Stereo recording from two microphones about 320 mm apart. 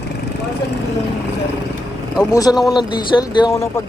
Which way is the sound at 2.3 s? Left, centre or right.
Centre.